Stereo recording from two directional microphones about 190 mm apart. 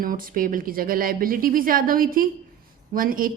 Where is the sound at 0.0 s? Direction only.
50° right (ahead or behind).